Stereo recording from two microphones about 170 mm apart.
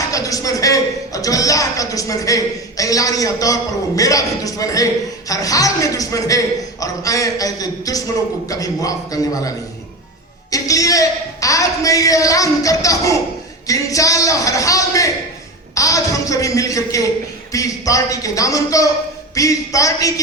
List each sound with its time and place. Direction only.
0.1 s a man's voice: 20° left (ahead or behind)
10.5 s a man's voice: 20° left (ahead or behind)